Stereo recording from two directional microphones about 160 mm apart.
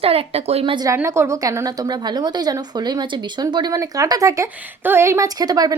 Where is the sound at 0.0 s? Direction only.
40° right (ahead or behind).